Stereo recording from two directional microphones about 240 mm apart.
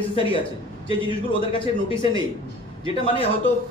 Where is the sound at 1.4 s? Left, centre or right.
Left.